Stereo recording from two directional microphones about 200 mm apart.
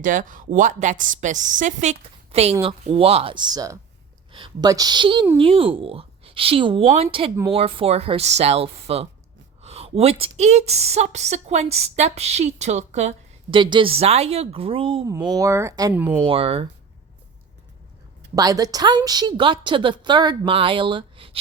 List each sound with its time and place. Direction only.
0.0 s a woman's voice: 40° right (ahead or behind); by 16.1 s 10° right (ahead or behind)
16.2 s a woman's voice: 30° right (ahead or behind)
18.3 s a woman's voice: 20° right (ahead or behind)